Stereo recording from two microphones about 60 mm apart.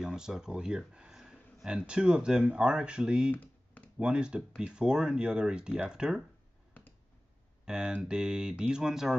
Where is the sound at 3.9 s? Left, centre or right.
Centre.